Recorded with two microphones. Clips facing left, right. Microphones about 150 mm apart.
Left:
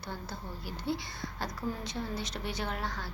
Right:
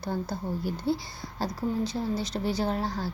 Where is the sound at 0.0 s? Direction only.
40° right (ahead or behind).